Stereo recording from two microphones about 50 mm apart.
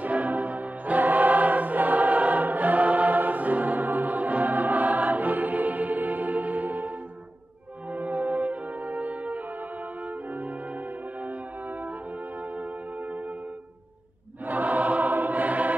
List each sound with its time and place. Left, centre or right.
0.0 s music: right
7.9 s music: right
12.5 s music: right
14.4 s choir: right